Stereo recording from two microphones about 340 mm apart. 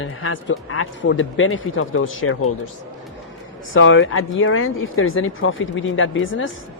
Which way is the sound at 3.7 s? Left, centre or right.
Left.